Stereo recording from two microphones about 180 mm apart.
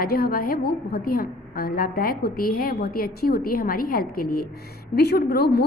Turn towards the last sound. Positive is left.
turn(degrees=60)  # may be behind; listen again after turning